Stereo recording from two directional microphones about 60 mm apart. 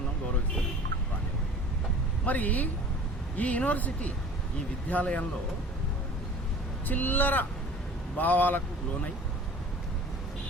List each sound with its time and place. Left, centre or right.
2.2 s speech: left
6.8 s speech: left